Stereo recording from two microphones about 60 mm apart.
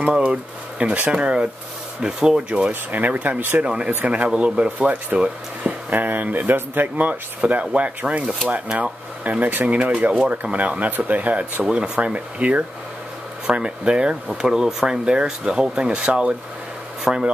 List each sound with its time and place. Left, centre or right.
0.0 s speech: centre
2.7 s speech: right
3.6 s speech: centre
11.6 s speech: centre